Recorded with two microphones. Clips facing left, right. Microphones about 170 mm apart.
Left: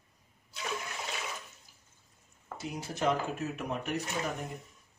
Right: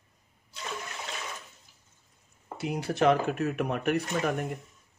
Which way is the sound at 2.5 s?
65° right (ahead or behind).